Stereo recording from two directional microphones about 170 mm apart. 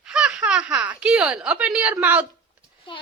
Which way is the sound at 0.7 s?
10° right (ahead or behind).